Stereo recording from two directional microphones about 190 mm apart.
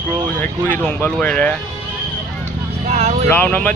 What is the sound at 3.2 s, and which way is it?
Speech, 10° left (ahead or behind).